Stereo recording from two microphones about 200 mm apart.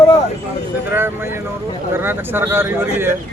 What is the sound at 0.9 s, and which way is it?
Speech, 10° right (ahead or behind).